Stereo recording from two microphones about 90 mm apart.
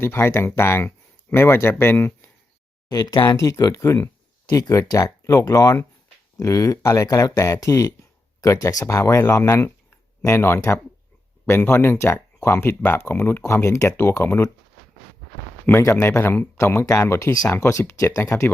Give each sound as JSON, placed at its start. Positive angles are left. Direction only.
{"t": 0.0, "sound": "speech", "side_deg": 25}
{"t": 2.9, "sound": "speech", "side_deg": 45}
{"t": 3.3, "sound": "speech", "side_deg": 35}
{"t": 15.8, "sound": "speech", "side_deg": 30}